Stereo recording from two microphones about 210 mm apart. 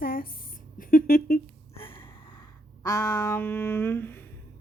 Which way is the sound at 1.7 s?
25° left (ahead or behind).